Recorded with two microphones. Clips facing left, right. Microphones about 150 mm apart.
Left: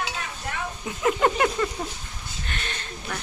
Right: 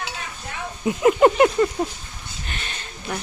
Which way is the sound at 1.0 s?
20° right (ahead or behind).